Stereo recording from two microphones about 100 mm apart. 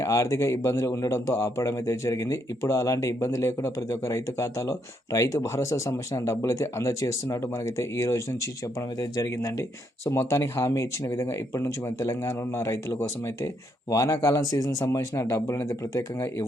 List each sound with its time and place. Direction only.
0.0 s a man's voice: 30° left (ahead or behind)